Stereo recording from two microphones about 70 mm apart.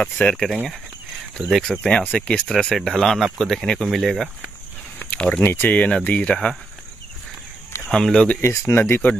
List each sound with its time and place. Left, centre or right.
0.0 s speech: centre
4.9 s a sound: left
5.4 s speech: left
7.9 s speech: centre
8.4 s speech: left